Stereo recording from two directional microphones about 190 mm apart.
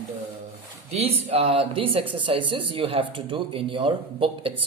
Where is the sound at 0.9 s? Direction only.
30° right (ahead or behind).